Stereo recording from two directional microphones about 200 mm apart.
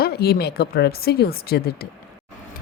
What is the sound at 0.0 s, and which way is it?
A woman's voice, 50° left (ahead or behind).